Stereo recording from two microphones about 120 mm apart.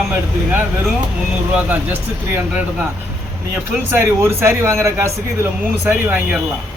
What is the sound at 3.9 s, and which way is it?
Speech, 20° right (ahead or behind).